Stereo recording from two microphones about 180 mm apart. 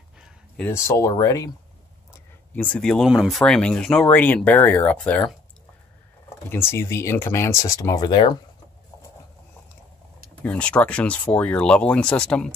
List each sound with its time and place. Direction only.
0.6 s speech: 15° left (ahead or behind)
2.1 s speech: 10° left (ahead or behind)
6.2 s speech: 15° left (ahead or behind)
10.4 s speech: 5° left (ahead or behind)